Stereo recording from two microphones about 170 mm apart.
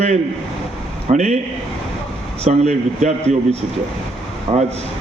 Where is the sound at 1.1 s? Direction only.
40° right (ahead or behind).